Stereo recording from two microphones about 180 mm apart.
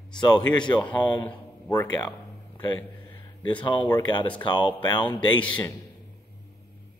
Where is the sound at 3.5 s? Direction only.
25° left (ahead or behind).